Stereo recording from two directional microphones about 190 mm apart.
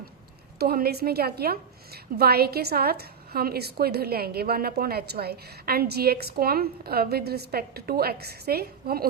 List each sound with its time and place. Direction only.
0.6 s a woman's voice: 55° right (ahead or behind)